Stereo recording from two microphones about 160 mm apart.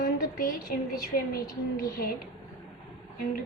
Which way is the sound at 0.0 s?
65° left (ahead or behind).